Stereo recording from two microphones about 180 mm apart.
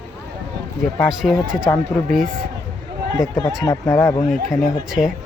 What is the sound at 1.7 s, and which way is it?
Speech, 15° left (ahead or behind).